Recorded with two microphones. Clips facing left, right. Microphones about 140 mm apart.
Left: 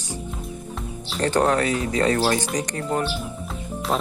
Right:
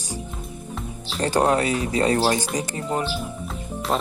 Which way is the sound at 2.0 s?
30° right (ahead or behind).